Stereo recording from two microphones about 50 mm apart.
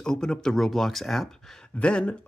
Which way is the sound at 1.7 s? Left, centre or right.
Left.